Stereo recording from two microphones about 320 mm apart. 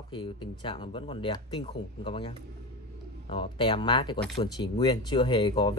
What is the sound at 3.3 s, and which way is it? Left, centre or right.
A man's voice, centre.